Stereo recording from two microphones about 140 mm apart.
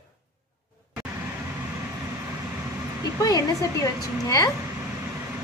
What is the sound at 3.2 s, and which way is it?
A woman's voice, 25° left (ahead or behind).